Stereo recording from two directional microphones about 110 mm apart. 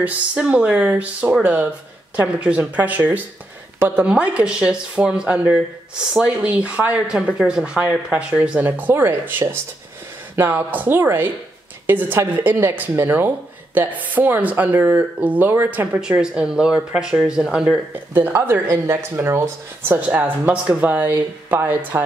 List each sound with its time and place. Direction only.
0.0 s speech: 10° right (ahead or behind)
18.1 s speech: 20° right (ahead or behind)